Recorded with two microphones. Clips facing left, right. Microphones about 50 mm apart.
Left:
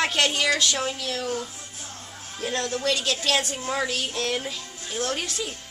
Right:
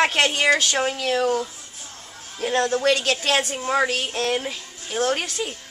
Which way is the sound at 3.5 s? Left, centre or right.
Right.